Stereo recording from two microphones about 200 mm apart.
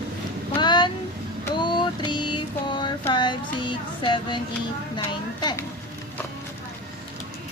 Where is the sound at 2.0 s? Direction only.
20° left (ahead or behind).